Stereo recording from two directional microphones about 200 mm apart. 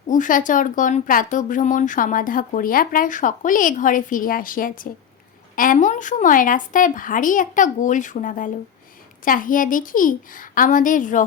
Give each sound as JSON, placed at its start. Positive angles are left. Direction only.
{"t": 0.1, "sound": "a woman's voice", "side_deg": 40}